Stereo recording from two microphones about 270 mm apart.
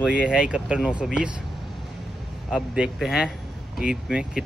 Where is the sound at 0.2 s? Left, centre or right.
Centre.